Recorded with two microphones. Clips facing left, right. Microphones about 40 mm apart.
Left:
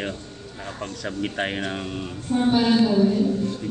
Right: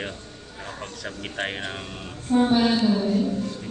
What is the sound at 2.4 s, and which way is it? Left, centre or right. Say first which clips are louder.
Speech: even; centre.